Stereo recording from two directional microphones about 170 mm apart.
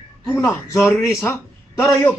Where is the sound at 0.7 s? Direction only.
15° left (ahead or behind).